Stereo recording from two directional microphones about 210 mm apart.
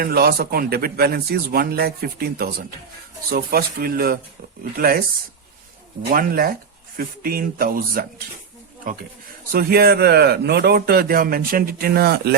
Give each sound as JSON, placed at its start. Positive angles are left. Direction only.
{"t": 0.0, "sound": "a man's voice", "side_deg": -45}
{"t": 6.1, "sound": "a man's voice", "side_deg": -45}
{"t": 9.5, "sound": "a man's voice", "side_deg": -45}